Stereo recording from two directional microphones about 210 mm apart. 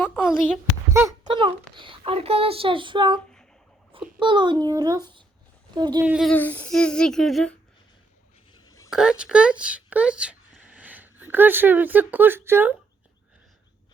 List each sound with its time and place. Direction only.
0.0 s speech: centre (ahead or behind)
1.3 s a child's voice: 25° right (ahead or behind)
4.2 s a child's voice: 20° right (ahead or behind)
6.1 s speech: centre (ahead or behind)
6.3 s speech: 10° left (ahead or behind)
8.5 s a sound: 15° left (ahead or behind)
8.9 s speech: 5° right (ahead or behind)